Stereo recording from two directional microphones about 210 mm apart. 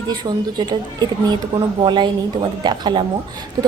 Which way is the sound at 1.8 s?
20° right (ahead or behind).